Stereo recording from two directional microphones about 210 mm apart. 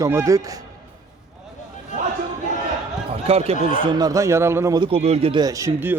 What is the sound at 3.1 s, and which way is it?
Speech, 30° right (ahead or behind).